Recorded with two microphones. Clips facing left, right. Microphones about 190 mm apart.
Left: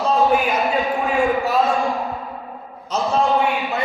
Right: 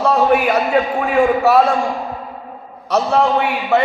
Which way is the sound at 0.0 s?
70° right (ahead or behind).